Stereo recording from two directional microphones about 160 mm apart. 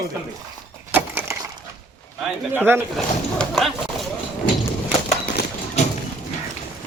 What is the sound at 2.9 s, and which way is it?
Speech, centre (ahead or behind).